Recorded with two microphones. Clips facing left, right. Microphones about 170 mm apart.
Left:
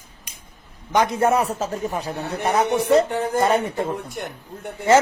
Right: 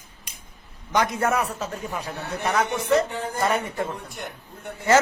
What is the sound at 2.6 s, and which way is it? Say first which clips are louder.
Speech: left 7 dB; 60° left (ahead or behind).